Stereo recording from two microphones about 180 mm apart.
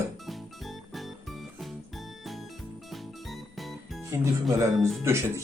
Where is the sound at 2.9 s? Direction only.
Centre (ahead or behind).